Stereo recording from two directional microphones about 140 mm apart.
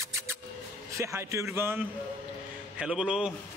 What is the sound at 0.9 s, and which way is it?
A man's voice, 20° right (ahead or behind).